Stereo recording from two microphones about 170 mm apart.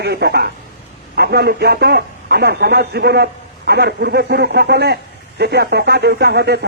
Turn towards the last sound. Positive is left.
turn(degrees=-80)